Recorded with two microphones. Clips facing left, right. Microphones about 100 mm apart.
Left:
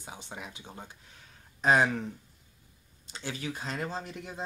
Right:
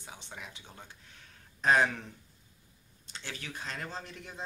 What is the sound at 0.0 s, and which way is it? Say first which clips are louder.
Speech: left 4 dB; 15° left (ahead or behind).